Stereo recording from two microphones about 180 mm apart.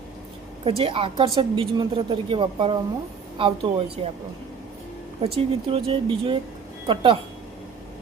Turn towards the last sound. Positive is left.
turn(degrees=-25)  # may be behind; listen again after turning